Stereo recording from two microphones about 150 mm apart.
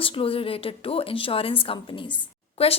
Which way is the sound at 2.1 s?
40° left (ahead or behind).